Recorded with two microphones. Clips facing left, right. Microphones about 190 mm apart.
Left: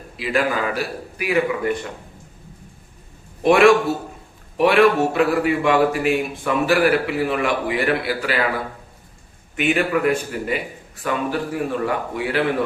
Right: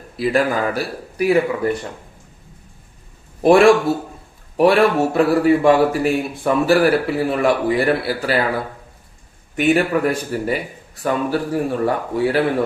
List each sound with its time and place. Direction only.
0.2 s a man's voice: 40° right (ahead or behind)
3.4 s a man's voice: 35° right (ahead or behind)
9.6 s a man's voice: 40° right (ahead or behind)